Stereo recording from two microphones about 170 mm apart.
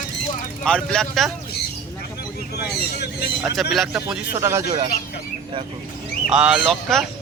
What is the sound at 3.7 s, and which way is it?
Speech, 5° right (ahead or behind).